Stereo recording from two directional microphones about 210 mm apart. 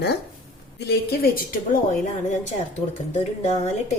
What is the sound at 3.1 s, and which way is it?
Speech, 30° left (ahead or behind).